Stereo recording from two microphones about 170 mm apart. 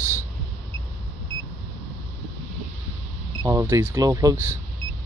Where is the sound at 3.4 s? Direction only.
15° right (ahead or behind).